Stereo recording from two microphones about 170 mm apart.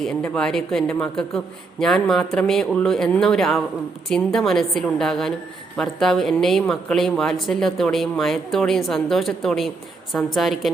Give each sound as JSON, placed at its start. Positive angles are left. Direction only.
{"t": 0.0, "sound": "speech", "side_deg": 5}